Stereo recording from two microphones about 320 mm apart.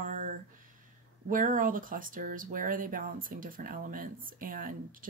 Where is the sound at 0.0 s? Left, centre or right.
Right.